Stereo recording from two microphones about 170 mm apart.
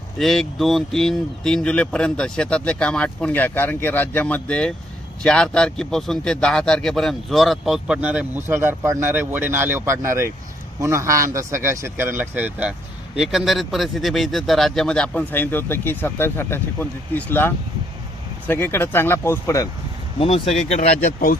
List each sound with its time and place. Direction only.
0.2 s a man's voice: centre (ahead or behind)
20.1 s speech: 35° left (ahead or behind); by 21.3 s 55° left (ahead or behind)